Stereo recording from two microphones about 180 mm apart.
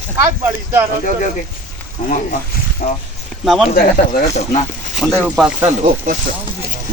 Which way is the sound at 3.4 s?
Centre (ahead or behind).